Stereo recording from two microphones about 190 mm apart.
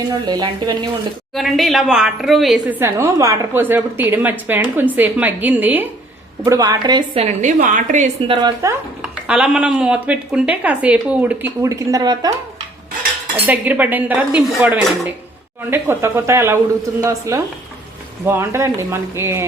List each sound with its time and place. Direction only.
0.1 s speech: 20° right (ahead or behind)
1.4 s a woman's voice: centre (ahead or behind)
6.4 s a woman's voice: 20° right (ahead or behind); by 8.4 s 35° right (ahead or behind)
8.4 s speech: 20° right (ahead or behind)
8.7 s a woman's voice: 5° right (ahead or behind)
13.5 s a woman's voice: 10° right (ahead or behind)
15.7 s a woman's voice: 15° right (ahead or behind)